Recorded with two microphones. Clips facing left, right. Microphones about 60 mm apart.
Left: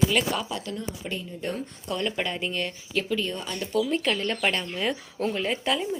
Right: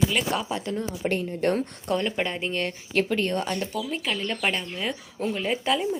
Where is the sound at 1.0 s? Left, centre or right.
Right.